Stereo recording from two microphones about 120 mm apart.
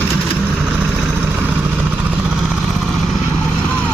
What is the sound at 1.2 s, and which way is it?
Vehicle, 15° right (ahead or behind).